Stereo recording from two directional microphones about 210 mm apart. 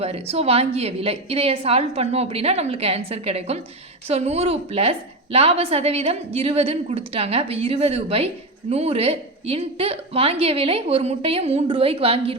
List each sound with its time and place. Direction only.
0.0 s a woman's voice: 30° right (ahead or behind)